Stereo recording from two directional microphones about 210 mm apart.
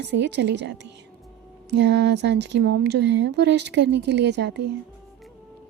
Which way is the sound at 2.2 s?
55° right (ahead or behind).